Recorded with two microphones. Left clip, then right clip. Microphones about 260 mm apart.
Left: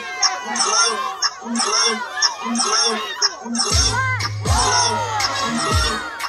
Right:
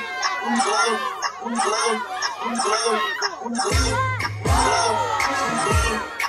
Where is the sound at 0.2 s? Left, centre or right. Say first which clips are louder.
Left 2 dB; right.